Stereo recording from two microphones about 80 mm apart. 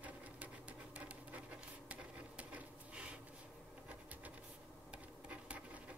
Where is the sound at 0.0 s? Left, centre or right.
Centre.